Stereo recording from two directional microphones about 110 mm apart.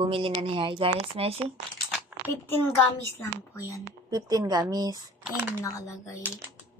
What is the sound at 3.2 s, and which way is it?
Speech, 30° left (ahead or behind).